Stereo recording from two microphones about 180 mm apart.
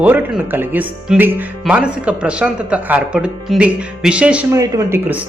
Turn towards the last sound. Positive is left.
turn(degrees=-15)  # may be behind; listen again after turning